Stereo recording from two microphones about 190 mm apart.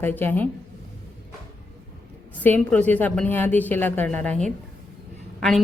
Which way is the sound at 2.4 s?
10° left (ahead or behind).